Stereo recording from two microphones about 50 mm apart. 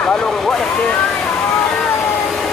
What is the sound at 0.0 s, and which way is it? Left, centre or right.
Vehicle, centre.